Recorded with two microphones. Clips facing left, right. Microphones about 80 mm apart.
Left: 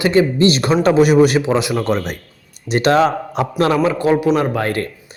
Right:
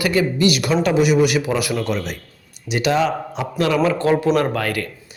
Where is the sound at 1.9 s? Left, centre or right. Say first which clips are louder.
Left 4 dB; left.